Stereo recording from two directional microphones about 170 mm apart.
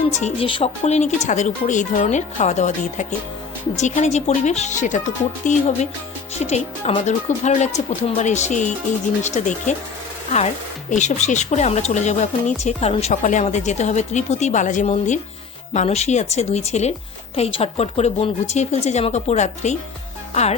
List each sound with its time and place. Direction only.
0.1 s a woman's voice: 40° left (ahead or behind)